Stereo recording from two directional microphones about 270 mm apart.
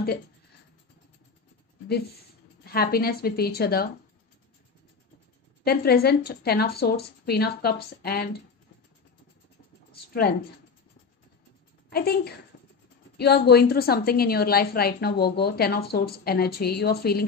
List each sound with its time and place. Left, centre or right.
2.6 s a woman's voice: left
5.6 s a woman's voice: left
11.9 s a woman's voice: left